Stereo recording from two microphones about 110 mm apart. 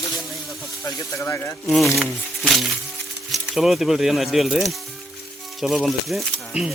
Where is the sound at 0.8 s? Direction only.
25° left (ahead or behind).